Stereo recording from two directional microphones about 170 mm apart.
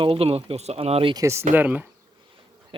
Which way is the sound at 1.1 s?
15° right (ahead or behind).